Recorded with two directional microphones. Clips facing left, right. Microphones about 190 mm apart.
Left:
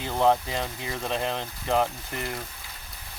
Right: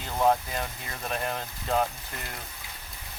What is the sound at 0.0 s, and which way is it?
Speech, 20° left (ahead or behind).